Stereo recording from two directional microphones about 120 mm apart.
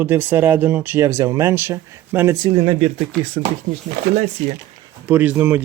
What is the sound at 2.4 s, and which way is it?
Speech, 45° right (ahead or behind).